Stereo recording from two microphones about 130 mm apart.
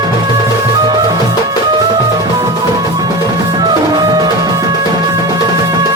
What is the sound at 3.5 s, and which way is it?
Music, 30° right (ahead or behind).